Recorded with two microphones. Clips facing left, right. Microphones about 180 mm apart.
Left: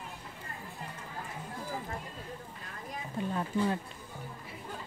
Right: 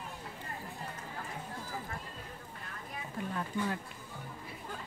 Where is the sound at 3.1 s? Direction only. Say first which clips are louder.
Left 4 dB; 25° left (ahead or behind).